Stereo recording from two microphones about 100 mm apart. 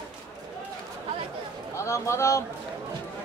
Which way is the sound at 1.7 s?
30° left (ahead or behind).